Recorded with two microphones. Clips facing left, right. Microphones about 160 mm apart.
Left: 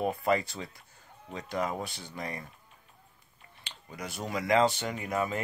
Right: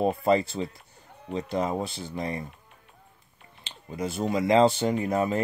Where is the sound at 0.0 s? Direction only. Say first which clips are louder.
Right 5 dB; 30° right (ahead or behind).